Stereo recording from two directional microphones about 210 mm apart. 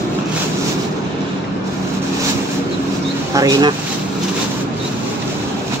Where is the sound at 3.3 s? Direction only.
15° right (ahead or behind).